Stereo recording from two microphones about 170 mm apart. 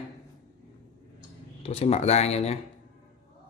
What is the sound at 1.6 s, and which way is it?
Speech, 40° left (ahead or behind).